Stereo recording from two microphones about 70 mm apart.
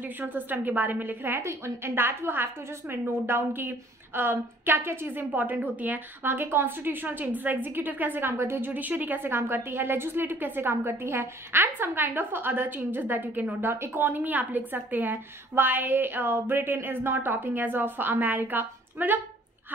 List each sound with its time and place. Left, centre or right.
0.2 s a woman's voice: right